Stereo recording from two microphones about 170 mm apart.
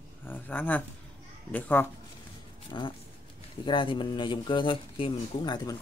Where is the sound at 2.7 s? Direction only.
25° left (ahead or behind).